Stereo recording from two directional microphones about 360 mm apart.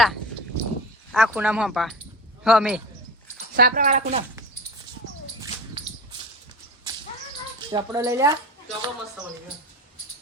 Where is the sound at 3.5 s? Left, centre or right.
Right.